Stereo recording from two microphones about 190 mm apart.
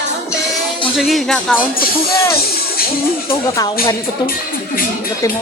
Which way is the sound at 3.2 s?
15° left (ahead or behind).